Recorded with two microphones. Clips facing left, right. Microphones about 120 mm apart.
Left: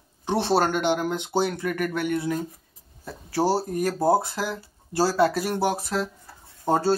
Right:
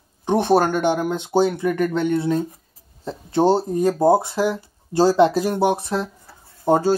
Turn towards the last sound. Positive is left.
turn(degrees=-15)  # may be behind; listen again after turning